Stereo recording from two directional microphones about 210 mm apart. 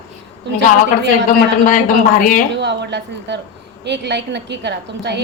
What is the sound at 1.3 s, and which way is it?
Speech, 40° left (ahead or behind).